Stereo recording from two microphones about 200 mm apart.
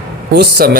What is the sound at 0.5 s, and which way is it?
Speech, 45° right (ahead or behind).